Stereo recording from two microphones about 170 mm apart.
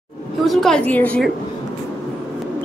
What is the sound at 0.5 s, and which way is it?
Speech, centre (ahead or behind).